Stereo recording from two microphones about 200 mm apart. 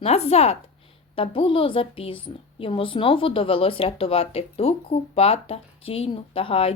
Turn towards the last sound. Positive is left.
turn(degrees=30)  # may be behind; listen again after turning